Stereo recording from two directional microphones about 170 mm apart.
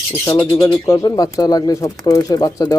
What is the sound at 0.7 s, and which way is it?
Speech, 15° left (ahead or behind).